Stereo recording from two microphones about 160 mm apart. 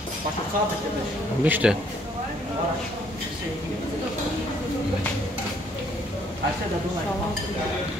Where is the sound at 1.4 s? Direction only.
10° right (ahead or behind).